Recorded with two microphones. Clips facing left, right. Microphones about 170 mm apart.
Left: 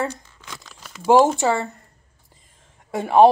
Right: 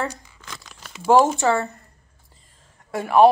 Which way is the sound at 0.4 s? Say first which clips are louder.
Even; centre (ahead or behind).